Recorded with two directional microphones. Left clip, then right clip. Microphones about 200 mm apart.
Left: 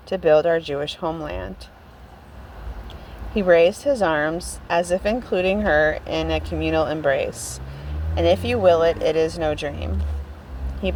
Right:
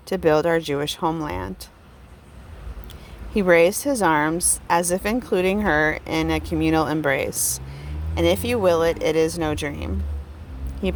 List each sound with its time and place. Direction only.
0.1 s a woman's voice: 50° right (ahead or behind)
3.3 s a woman's voice: 45° right (ahead or behind)